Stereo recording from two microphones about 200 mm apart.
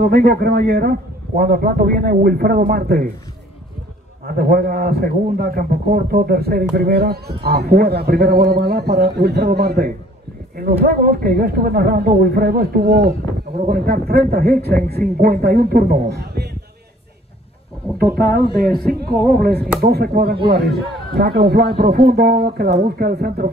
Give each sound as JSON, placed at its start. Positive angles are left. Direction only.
{"t": 0.0, "sound": "a man's voice", "side_deg": -55}
{"t": 4.3, "sound": "a man's voice", "side_deg": -50}
{"t": 17.9, "sound": "a man's voice", "side_deg": -50}